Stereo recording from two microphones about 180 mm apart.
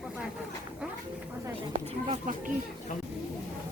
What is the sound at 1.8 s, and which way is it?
Speech, 35° right (ahead or behind).